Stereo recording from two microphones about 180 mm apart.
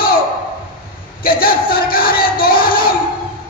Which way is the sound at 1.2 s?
55° left (ahead or behind).